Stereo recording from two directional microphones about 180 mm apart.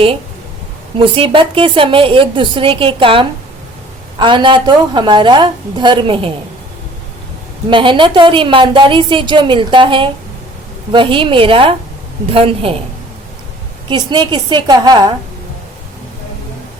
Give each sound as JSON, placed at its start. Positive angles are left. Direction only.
{"t": 0.9, "sound": "a woman's voice", "side_deg": -30}
{"t": 7.7, "sound": "a woman's voice", "side_deg": -25}
{"t": 13.9, "sound": "a woman's voice", "side_deg": -25}